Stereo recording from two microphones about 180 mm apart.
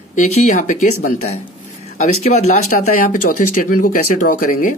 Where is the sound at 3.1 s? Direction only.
50° left (ahead or behind).